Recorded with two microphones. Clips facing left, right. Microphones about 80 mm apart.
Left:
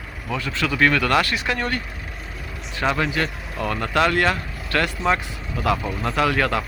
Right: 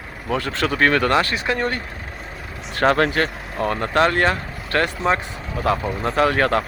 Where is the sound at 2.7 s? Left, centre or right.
Right.